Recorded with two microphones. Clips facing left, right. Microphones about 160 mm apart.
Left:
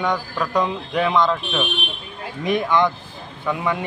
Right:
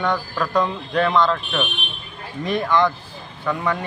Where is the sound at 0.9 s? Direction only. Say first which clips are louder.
Right 1 dB; 10° left (ahead or behind).